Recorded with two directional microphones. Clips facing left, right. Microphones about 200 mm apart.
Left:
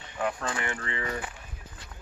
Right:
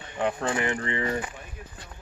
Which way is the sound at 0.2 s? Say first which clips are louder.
Right 4 dB; 20° right (ahead or behind).